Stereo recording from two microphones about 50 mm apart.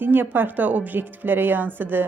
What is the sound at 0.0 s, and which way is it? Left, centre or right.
Speech, right.